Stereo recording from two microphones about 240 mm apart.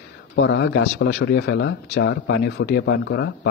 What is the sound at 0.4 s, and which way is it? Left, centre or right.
Speech, left.